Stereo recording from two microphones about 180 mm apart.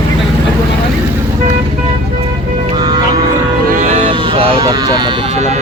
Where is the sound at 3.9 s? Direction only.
30° right (ahead or behind).